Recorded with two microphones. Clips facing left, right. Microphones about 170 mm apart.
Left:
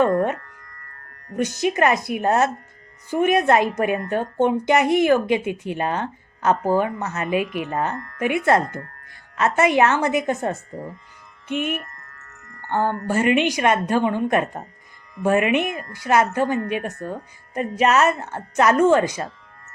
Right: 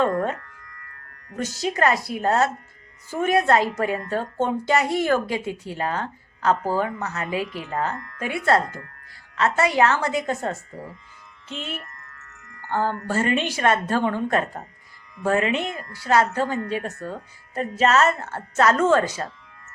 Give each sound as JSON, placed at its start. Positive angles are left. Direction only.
{"t": 0.7, "sound": "music", "side_deg": 40}
{"t": 1.4, "sound": "speech", "side_deg": 20}
{"t": 7.9, "sound": "speech", "side_deg": 40}
{"t": 8.2, "sound": "speech", "side_deg": 20}
{"t": 11.7, "sound": "music", "side_deg": 45}
{"t": 12.7, "sound": "speech", "side_deg": 20}